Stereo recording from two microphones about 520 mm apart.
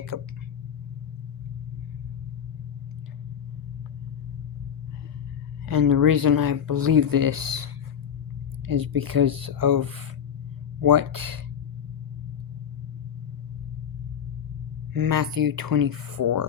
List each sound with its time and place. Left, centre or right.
0.1 s speech: right
5.6 s speech: right
8.6 s speech: right
14.9 s speech: right